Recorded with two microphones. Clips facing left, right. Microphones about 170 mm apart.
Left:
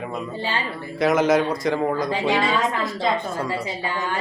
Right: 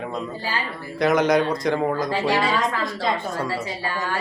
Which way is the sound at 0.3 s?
25° left (ahead or behind).